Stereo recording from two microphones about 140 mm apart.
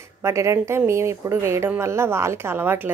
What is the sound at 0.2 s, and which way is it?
A woman's voice, 20° right (ahead or behind).